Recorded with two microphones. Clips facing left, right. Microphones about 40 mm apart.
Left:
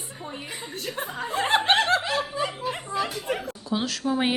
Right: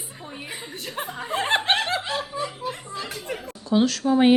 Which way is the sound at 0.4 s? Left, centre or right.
Centre.